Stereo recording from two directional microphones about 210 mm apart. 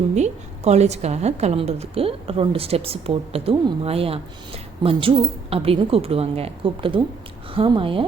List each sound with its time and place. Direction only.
0.1 s a woman's voice: 30° right (ahead or behind)